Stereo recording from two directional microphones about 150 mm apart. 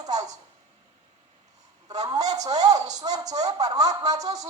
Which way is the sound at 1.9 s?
25° right (ahead or behind).